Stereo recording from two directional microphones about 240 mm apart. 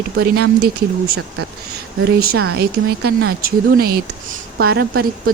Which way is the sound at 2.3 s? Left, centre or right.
Right.